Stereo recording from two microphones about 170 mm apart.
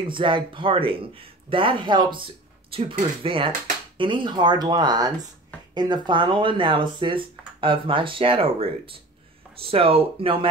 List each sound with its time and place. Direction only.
0.1 s speech: 30° right (ahead or behind)